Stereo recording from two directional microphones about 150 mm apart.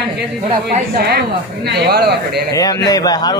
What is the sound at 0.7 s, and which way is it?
A man's voice, 75° right (ahead or behind).